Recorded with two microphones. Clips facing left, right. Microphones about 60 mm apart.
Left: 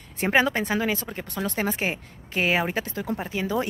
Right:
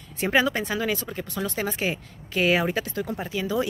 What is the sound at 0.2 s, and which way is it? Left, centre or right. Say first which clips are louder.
Speech: left 1 dB; left.